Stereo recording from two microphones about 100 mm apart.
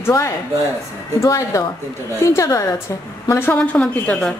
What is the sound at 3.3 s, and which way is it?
A woman's voice, 20° left (ahead or behind).